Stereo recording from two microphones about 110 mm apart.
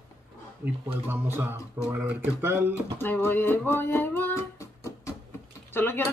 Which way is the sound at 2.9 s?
20° left (ahead or behind).